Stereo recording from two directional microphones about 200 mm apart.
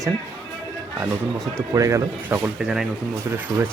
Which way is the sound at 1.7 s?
15° right (ahead or behind).